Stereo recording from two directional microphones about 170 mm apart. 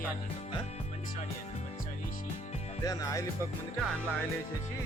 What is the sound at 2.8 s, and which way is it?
Music, 20° left (ahead or behind).